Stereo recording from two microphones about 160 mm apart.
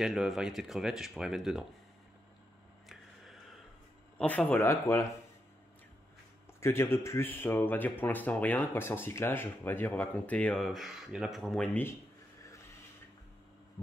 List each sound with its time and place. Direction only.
0.0 s speech: centre (ahead or behind)
4.2 s speech: 10° left (ahead or behind)
6.6 s speech: 15° left (ahead or behind)